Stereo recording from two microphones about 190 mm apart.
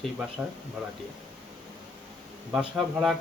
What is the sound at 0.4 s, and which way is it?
Speech, 5° right (ahead or behind).